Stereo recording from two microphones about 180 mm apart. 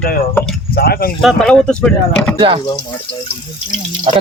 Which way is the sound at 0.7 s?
55° left (ahead or behind).